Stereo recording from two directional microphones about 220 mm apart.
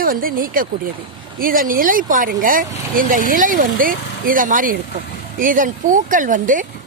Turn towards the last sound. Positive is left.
turn(degrees=-35)  # may be behind; listen again after turning